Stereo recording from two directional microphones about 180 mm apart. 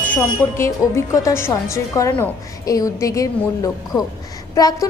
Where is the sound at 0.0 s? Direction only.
10° left (ahead or behind).